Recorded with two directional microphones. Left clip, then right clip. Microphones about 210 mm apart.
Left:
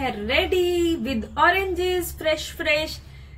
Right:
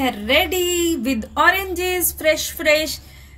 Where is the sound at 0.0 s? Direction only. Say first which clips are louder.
Right 5 dB; 40° right (ahead or behind).